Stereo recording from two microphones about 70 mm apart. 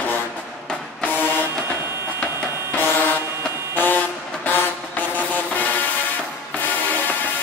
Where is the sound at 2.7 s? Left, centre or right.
Left.